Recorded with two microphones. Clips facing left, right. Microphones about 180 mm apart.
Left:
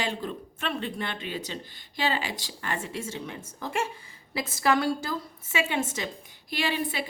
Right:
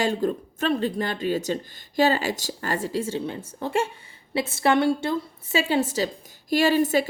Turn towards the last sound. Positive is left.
turn(degrees=-45)  # may be behind; listen again after turning